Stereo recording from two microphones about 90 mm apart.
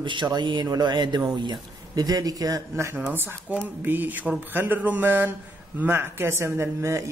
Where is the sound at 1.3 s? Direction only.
45° right (ahead or behind).